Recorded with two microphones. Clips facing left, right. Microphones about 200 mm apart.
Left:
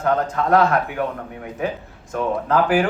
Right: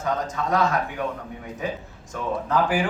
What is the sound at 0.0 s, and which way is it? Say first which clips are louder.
Speech: left 6 dB; 60° left (ahead or behind).